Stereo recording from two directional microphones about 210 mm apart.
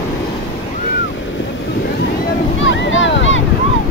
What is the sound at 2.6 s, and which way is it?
Boat, 65° left (ahead or behind).